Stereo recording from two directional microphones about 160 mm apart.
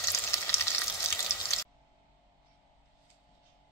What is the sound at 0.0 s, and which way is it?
Frying, 15° left (ahead or behind).